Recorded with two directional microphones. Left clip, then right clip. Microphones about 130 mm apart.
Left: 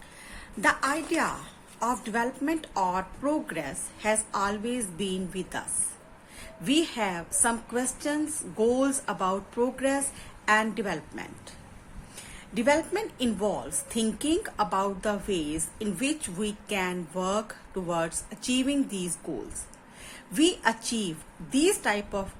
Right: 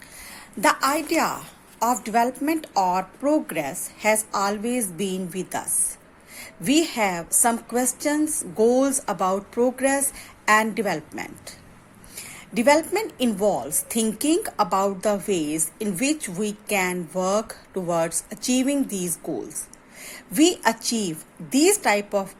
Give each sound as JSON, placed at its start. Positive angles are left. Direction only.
{"t": 0.6, "sound": "a woman's voice", "side_deg": -45}
{"t": 6.7, "sound": "a woman's voice", "side_deg": -40}
{"t": 12.5, "sound": "a woman's voice", "side_deg": -40}